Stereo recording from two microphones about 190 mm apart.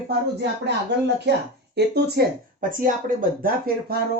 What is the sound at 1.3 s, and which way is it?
Speech, 60° right (ahead or behind).